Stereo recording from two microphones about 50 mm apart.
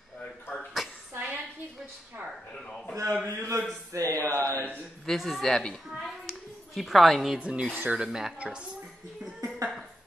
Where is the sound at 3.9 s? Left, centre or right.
Right.